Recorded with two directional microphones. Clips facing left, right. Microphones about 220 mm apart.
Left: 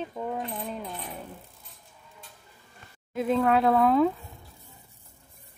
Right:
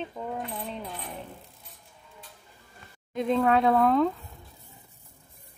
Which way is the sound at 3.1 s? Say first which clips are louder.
Even; 5° left (ahead or behind).